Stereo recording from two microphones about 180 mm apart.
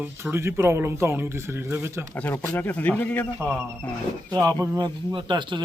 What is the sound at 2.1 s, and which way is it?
A man's voice, 10° left (ahead or behind).